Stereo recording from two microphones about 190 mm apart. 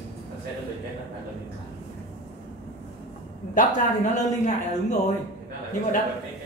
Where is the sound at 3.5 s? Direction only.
40° left (ahead or behind).